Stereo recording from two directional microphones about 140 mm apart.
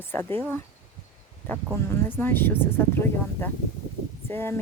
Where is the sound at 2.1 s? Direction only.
15° left (ahead or behind).